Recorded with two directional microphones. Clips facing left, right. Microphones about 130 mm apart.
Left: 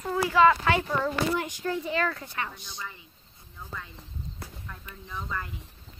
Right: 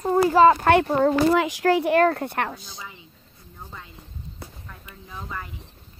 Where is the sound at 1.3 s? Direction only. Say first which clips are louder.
Right 10 dB; 90° right; by 2.5 s 65° right (ahead or behind).